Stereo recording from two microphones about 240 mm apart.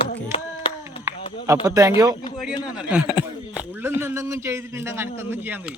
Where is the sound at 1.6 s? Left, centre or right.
Centre.